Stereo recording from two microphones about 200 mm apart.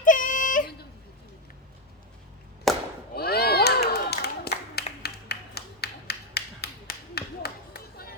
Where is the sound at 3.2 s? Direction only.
50° left (ahead or behind).